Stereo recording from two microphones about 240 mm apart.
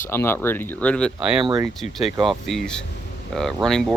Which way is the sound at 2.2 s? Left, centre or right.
Centre.